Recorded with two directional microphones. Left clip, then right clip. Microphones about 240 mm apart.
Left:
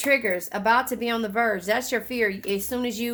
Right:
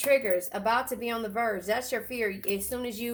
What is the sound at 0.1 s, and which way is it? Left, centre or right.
Speech, left.